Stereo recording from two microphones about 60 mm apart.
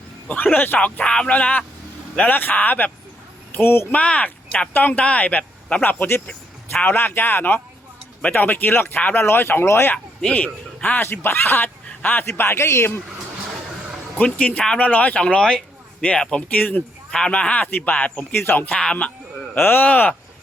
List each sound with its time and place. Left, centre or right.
0.3 s a man's voice: left
3.9 s a man's voice: left
6.8 s speech: left
10.2 s a man's voice: left
11.0 s speech: left
12.4 s speech: left
14.2 s a man's voice: left
15.4 s a sound: centre
16.5 s a man's voice: left
17.1 s a man's voice: centre
18.3 s speech: left
18.8 s a man's voice: centre
19.5 s speech: left